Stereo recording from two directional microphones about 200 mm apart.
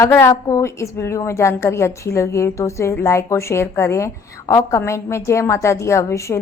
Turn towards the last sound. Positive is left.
turn(degrees=15)  # may be behind; listen again after turning